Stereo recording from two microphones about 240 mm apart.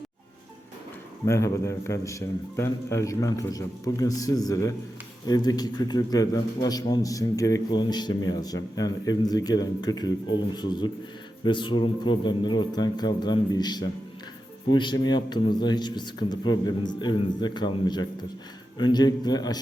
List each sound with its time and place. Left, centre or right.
1.2 s a man's voice: centre